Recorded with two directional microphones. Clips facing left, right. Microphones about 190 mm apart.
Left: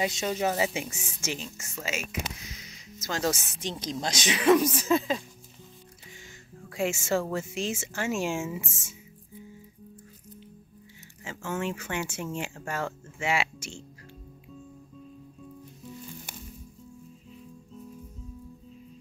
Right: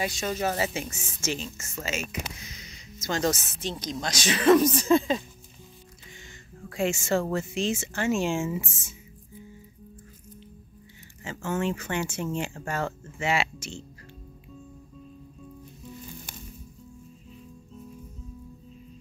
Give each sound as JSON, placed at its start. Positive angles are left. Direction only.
{"t": 0.0, "sound": "speech", "side_deg": 20}
{"t": 3.8, "sound": "speech", "side_deg": 30}
{"t": 6.7, "sound": "speech", "side_deg": 5}
{"t": 11.2, "sound": "speech", "side_deg": 10}